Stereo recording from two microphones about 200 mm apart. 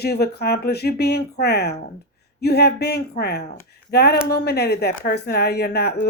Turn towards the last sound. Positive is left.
turn(degrees=55)  # may be behind; listen again after turning